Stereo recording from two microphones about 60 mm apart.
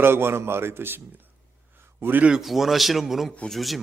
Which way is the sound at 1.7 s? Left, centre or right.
Right.